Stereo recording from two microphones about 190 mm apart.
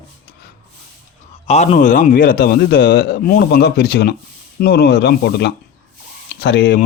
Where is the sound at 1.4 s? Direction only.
35° left (ahead or behind); by 6.8 s 60° left (ahead or behind).